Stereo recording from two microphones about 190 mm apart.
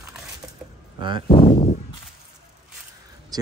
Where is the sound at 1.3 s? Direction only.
30° left (ahead or behind).